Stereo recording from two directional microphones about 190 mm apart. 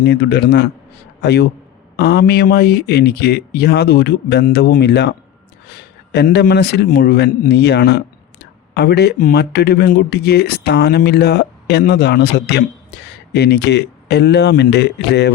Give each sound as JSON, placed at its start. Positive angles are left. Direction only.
{"t": 0.0, "sound": "speech", "side_deg": 60}